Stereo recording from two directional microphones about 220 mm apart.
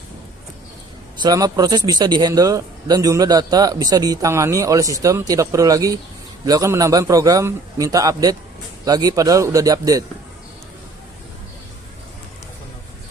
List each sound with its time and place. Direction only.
1.2 s speech: 15° right (ahead or behind)